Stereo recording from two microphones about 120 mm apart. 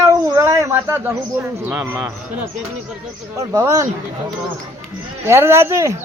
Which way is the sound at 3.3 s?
25° right (ahead or behind).